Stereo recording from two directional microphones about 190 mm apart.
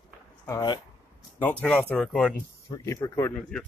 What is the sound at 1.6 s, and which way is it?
Speech, 5° left (ahead or behind).